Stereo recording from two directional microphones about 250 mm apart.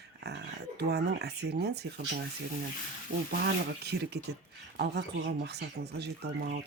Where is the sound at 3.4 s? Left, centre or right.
Right.